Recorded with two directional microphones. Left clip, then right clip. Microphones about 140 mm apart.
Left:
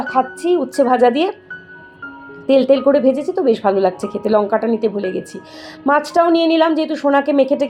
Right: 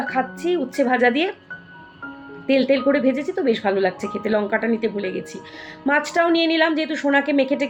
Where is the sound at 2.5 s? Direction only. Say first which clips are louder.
Left 6 dB; 30° left (ahead or behind).